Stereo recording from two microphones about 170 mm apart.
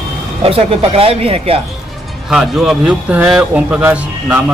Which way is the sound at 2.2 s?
5° right (ahead or behind).